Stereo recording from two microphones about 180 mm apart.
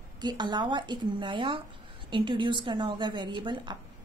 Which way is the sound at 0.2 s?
25° right (ahead or behind).